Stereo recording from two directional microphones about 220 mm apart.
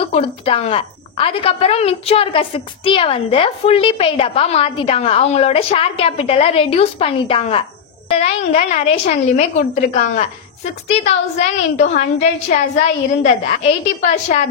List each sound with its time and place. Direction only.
0.1 s a woman's voice: 25° left (ahead or behind)